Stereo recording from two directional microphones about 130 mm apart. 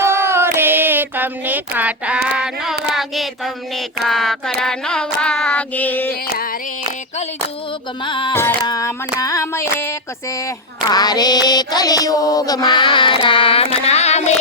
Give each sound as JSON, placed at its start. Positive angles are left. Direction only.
{"t": 0.0, "sound": "child singing", "side_deg": -20}
{"t": 8.0, "sound": "music", "side_deg": 40}
{"t": 8.3, "sound": "music", "side_deg": 15}
{"t": 8.6, "sound": "a sound", "side_deg": 30}
{"t": 10.9, "sound": "music", "side_deg": 30}
{"t": 13.8, "sound": "speech", "side_deg": 55}